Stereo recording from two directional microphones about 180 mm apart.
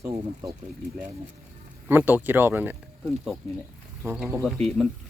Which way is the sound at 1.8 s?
10° right (ahead or behind).